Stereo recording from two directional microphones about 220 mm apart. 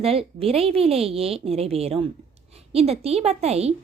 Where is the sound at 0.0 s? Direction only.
25° right (ahead or behind).